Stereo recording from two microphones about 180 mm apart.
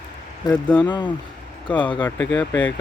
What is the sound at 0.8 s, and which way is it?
Speech, 25° left (ahead or behind).